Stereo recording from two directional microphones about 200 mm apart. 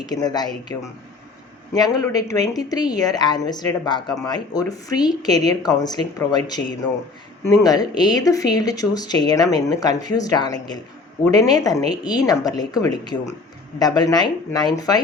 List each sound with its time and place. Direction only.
0.0 s a woman's voice: 20° left (ahead or behind)